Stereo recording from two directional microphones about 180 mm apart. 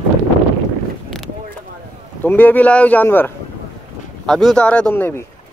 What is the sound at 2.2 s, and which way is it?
Speech, 10° left (ahead or behind).